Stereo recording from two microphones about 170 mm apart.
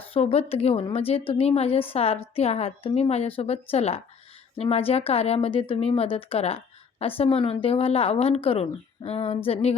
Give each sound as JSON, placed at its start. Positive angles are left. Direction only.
{"t": 0.1, "sound": "a woman's voice", "side_deg": 35}